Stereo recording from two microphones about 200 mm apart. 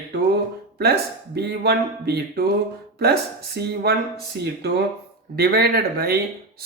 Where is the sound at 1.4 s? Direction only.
55° right (ahead or behind).